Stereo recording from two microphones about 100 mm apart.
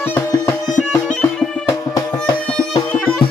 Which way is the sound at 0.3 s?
30° left (ahead or behind).